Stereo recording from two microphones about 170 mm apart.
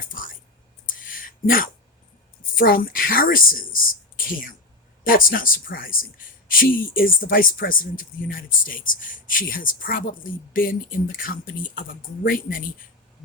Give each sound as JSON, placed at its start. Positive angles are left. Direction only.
{"t": 0.1, "sound": "speech", "side_deg": 55}
{"t": 0.9, "sound": "a sound", "side_deg": 55}
{"t": 2.6, "sound": "speech", "side_deg": 55}
{"t": 5.0, "sound": "speech", "side_deg": 55}